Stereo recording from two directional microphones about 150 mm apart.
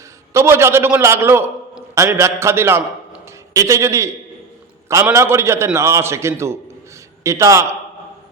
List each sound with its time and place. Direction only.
0.3 s a man's voice: 15° right (ahead or behind)
5.1 s a man's voice: 20° right (ahead or behind)